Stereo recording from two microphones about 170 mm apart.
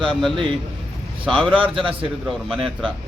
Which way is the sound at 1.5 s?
30° right (ahead or behind).